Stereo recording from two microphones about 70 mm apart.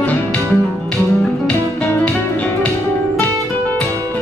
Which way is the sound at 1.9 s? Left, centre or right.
Left.